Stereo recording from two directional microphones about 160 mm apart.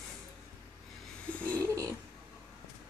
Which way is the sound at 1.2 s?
10° left (ahead or behind).